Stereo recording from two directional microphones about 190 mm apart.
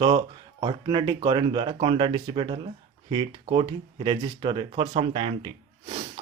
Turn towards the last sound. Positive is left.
turn(degrees=-25)  # may be behind; listen again after turning